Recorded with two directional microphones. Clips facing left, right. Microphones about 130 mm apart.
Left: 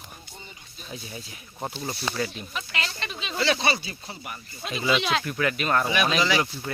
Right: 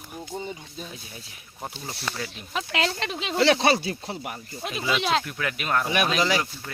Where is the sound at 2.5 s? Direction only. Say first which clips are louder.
Right 7 dB; 90° right.